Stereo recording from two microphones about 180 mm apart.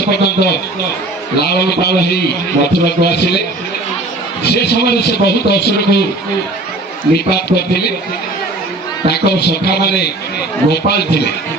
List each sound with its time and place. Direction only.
0.1 s a man's voice: 65° left (ahead or behind)
4.4 s a man's voice: 65° left (ahead or behind)
7.3 s a man's voice: 65° left (ahead or behind)
9.0 s a man's voice: 65° left (ahead or behind)